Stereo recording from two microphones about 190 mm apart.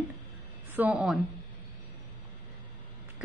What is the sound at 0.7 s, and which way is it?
Speech, 5° right (ahead or behind).